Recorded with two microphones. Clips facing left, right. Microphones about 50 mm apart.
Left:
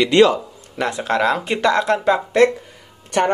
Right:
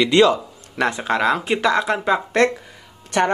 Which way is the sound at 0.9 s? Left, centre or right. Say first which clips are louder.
Left 1 dB; centre.